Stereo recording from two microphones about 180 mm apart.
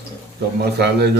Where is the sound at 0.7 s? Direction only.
65° right (ahead or behind).